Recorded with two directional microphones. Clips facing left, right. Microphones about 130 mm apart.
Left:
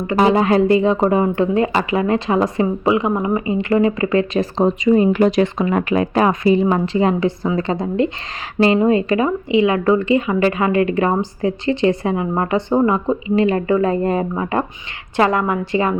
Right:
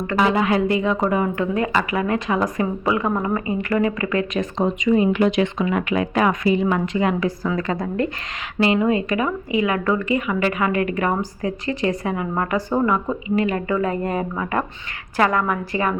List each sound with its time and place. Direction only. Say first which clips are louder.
0.3 s a woman's voice: left 5 dB; 35° left (ahead or behind)